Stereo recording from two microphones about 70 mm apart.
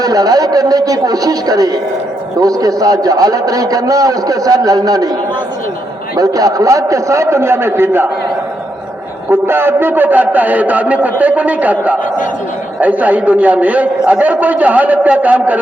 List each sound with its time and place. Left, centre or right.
0.0 s a man's voice: right
6.1 s a man's voice: right
9.3 s a man's voice: right